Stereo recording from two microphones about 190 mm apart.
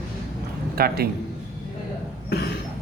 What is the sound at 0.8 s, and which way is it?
Speech, 55° right (ahead or behind).